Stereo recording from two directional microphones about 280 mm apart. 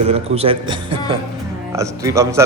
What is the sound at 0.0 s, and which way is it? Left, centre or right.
A man's voice, right.